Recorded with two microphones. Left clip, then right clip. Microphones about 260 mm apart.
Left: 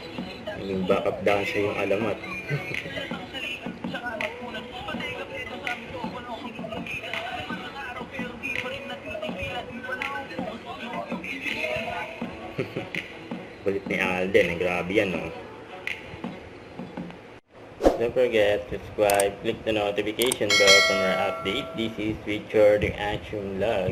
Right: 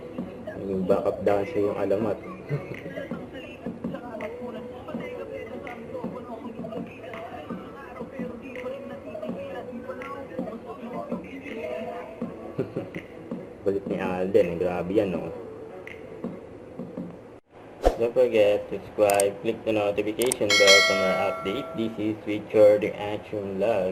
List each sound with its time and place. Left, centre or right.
0.9 s a man's voice: left
1.5 s speech: centre
3.9 s a sound: centre
11.1 s a sound: centre
13.7 s a man's voice: left
17.8 s speech: centre